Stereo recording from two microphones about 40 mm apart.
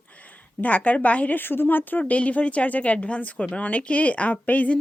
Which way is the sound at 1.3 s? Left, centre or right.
Left.